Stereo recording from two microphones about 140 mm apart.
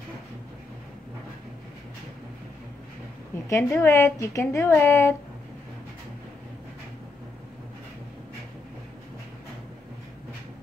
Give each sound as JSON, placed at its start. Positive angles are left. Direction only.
{"t": 3.4, "sound": "a woman's voice", "side_deg": 20}